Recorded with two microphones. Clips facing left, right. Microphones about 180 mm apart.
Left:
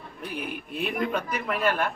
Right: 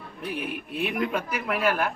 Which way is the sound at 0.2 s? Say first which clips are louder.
Right 2 dB; centre (ahead or behind).